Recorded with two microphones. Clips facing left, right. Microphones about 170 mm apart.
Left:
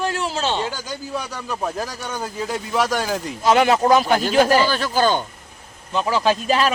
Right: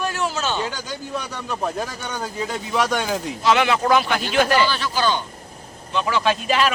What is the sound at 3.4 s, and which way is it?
Speech, 45° left (ahead or behind).